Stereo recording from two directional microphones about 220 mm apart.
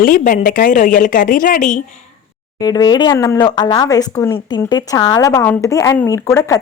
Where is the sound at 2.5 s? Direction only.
15° left (ahead or behind).